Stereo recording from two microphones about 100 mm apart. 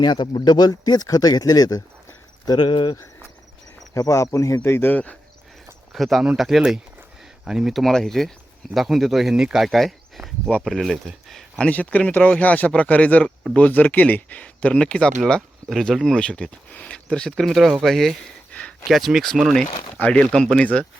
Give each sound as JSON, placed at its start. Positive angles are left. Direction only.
{"t": 0.0, "sound": "speech", "side_deg": 50}
{"t": 2.5, "sound": "speech", "side_deg": 55}
{"t": 3.9, "sound": "speech", "side_deg": 30}
{"t": 5.9, "sound": "speech", "side_deg": 0}